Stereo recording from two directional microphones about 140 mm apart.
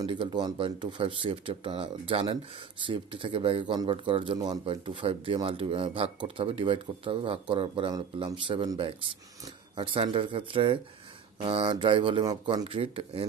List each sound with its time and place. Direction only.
0.0 s speech: 35° right (ahead or behind)
12.6 s speech: 40° right (ahead or behind)